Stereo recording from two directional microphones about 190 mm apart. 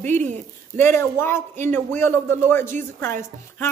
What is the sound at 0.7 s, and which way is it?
Speech, 10° left (ahead or behind).